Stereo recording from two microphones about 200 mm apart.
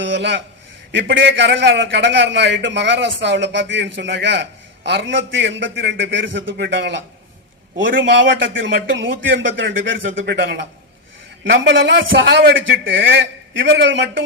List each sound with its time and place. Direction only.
0.0 s a man's voice: 65° right (ahead or behind)